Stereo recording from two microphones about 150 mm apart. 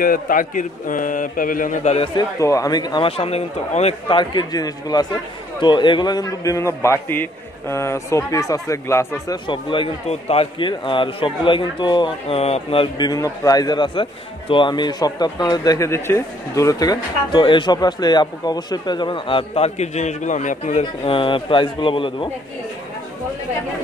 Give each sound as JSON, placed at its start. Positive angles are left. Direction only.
{"t": 0.0, "sound": "a man's voice", "side_deg": 65}
{"t": 2.1, "sound": "speech", "side_deg": 20}
{"t": 3.1, "sound": "speech", "side_deg": 40}
{"t": 4.2, "sound": "speech", "side_deg": 30}
{"t": 9.5, "sound": "a man's voice", "side_deg": 35}
{"t": 20.8, "sound": "a man's voice", "side_deg": 35}